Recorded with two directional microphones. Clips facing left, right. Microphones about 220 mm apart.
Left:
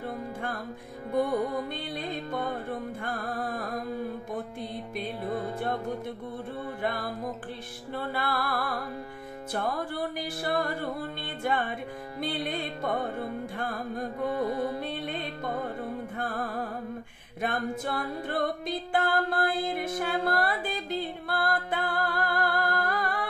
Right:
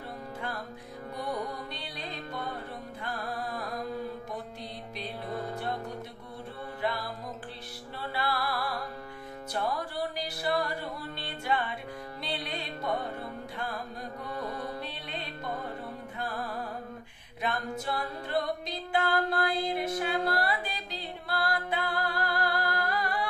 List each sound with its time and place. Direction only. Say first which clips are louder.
1.1 s music: left 9 dB; 50° left (ahead or behind)
7.9 s music: left 2 dB; 50° left (ahead or behind)
14.3 s music: left 6 dB; 25° left (ahead or behind)
14.8 s music: left 6 dB; 50° left (ahead or behind)
17.4 s a capella: left 3 dB; 50° left (ahead or behind)